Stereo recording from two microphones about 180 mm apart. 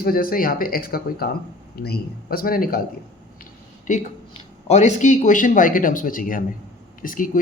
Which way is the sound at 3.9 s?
40° left (ahead or behind).